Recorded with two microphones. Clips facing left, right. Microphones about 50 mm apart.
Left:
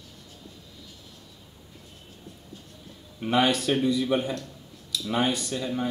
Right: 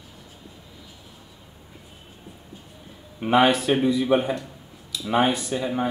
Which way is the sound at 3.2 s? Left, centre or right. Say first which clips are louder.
Right 5 dB; centre.